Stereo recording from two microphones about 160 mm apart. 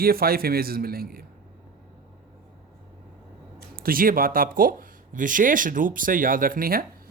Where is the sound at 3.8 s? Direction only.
65° right (ahead or behind).